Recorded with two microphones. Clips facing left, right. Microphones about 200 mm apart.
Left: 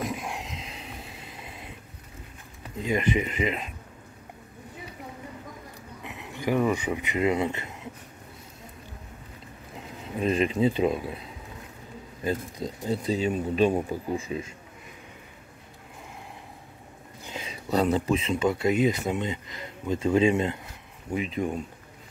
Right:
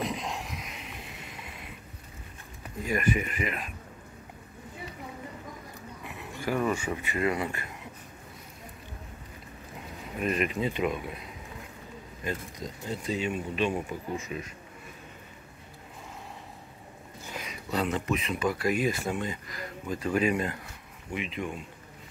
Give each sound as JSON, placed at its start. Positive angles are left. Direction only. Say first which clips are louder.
{"t": 0.1, "sound": "a sound", "louder": "left 1 dB", "side_deg": 10}
{"t": 2.8, "sound": "speech", "louder": "left 3 dB", "side_deg": 20}
{"t": 6.0, "sound": "speech", "louder": "left 4 dB", "side_deg": 20}
{"t": 10.1, "sound": "speech", "louder": "left 4 dB", "side_deg": 25}
{"t": 12.3, "sound": "speech", "louder": "left 6 dB", "side_deg": 35}
{"t": 17.3, "sound": "a sound", "louder": "left 2 dB", "side_deg": 25}
{"t": 17.6, "sound": "speech", "louder": "left 6 dB", "side_deg": 35}
{"t": 21.1, "sound": "speech", "louder": "left 6 dB", "side_deg": 35}